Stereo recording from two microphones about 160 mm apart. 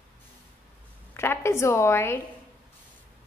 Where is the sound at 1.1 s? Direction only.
15° left (ahead or behind).